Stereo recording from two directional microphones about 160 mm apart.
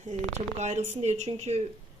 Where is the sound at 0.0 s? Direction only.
45° right (ahead or behind).